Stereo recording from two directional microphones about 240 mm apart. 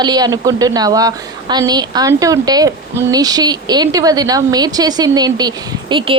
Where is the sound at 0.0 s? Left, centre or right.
Centre.